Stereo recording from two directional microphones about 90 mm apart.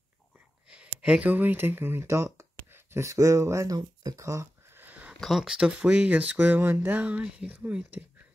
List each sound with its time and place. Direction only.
0.7 s speech: 10° right (ahead or behind); by 4.8 s 35° right (ahead or behind)
4.8 s a sound: 15° right (ahead or behind)
5.2 s speech: 5° right (ahead or behind)